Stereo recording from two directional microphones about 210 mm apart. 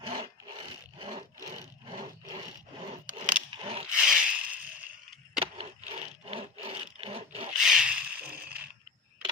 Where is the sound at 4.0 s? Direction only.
5° right (ahead or behind).